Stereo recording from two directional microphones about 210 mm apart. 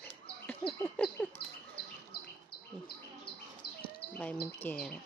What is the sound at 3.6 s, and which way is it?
Bird vocalization, 50° left (ahead or behind).